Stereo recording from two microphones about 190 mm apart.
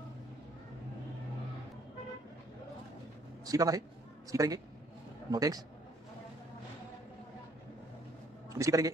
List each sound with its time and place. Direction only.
3.4 s a man's voice: 20° right (ahead or behind)
8.5 s a man's voice: 15° right (ahead or behind)